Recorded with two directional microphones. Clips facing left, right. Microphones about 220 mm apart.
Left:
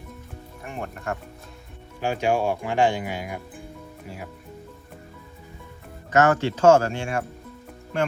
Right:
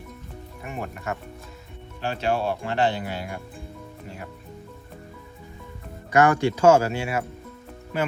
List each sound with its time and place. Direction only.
0.6 s speech: centre (ahead or behind)
2.0 s speech: 10° left (ahead or behind)
6.1 s speech: 15° right (ahead or behind)